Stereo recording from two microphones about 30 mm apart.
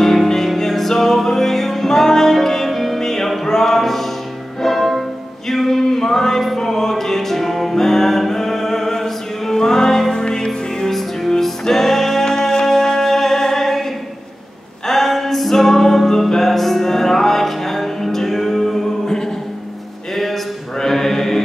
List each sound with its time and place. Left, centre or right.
0.0 s music: centre
3.4 s a sound: centre
4.6 s music: centre
5.5 s a sound: centre
6.7 s music: centre
10.1 s music: left
10.9 s music: centre
14.9 s music: centre
20.7 s mantra: centre